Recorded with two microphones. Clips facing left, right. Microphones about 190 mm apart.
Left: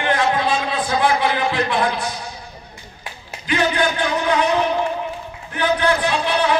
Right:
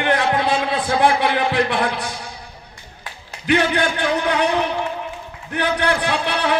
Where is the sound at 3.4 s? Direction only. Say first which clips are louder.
Right 1 dB; 65° right (ahead or behind).